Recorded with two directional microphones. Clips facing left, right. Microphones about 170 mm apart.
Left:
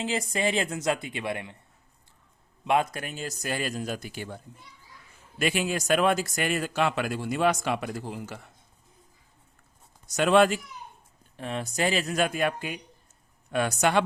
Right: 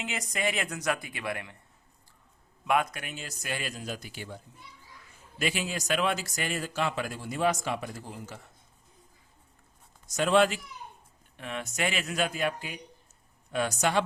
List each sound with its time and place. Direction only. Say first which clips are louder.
0.0 s speech: left 5 dB; 30° left (ahead or behind)
2.6 s speech: left 2 dB; 30° left (ahead or behind); by 4.4 s 50° left (ahead or behind)
5.4 s speech: left 5 dB; 55° left (ahead or behind); by 8.4 s 70° left (ahead or behind)
10.2 s speech: left 3 dB; 65° left (ahead or behind)
11.3 s speech: left 4 dB; 35° left (ahead or behind)
12.2 s speech: left 1 dB; 55° left (ahead or behind)